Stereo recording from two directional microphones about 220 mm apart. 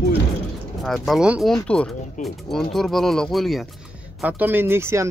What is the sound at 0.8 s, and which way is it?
Speech, centre (ahead or behind).